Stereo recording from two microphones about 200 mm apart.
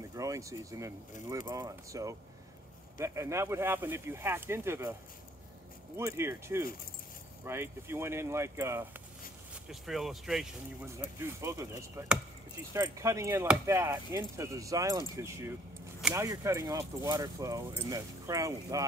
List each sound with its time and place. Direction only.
0.1 s speech: 15° right (ahead or behind)
5.9 s speech: 15° right (ahead or behind)
9.7 s speech: centre (ahead or behind)